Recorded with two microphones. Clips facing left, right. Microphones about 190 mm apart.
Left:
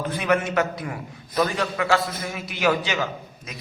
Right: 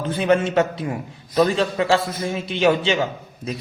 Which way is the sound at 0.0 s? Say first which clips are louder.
Right 4 dB; 30° right (ahead or behind).